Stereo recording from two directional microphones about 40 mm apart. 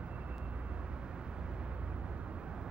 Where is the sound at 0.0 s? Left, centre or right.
Right.